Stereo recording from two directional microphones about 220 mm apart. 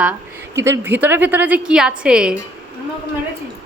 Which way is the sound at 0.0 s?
10° right (ahead or behind).